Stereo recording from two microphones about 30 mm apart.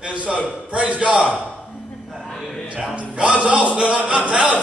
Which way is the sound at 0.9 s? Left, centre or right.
Right.